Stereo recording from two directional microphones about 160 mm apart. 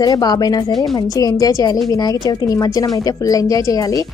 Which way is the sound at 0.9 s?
25° left (ahead or behind).